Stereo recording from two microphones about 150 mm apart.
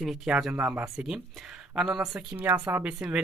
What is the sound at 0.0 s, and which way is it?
Speech, centre (ahead or behind).